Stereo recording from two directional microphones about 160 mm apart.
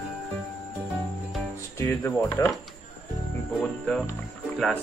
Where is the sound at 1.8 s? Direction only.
15° left (ahead or behind).